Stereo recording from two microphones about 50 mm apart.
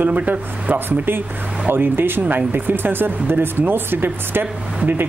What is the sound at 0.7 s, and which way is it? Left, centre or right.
Speech, right.